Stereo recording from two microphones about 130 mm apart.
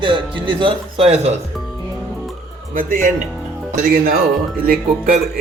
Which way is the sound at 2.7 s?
90° right.